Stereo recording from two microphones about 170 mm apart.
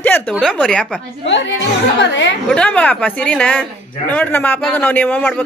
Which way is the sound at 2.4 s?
5° left (ahead or behind).